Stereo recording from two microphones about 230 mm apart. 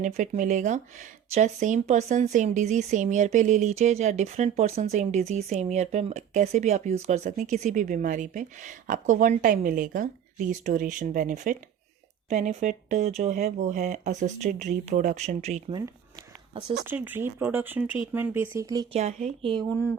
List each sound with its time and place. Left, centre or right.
0.0 s speech: right
16.8 s speech: centre
18.9 s speech: right